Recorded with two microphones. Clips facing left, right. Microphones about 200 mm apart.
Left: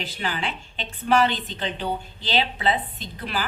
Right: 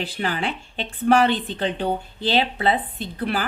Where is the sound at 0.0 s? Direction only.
55° right (ahead or behind).